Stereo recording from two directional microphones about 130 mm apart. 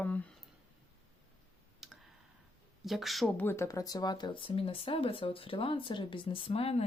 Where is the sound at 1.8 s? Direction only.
5° right (ahead or behind).